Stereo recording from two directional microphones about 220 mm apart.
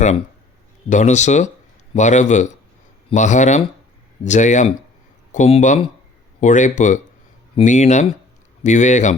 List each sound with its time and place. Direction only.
0.9 s a man's voice: 35° left (ahead or behind)